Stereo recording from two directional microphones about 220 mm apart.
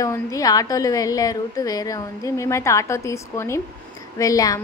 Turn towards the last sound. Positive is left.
turn(degrees=15)  # may be behind; listen again after turning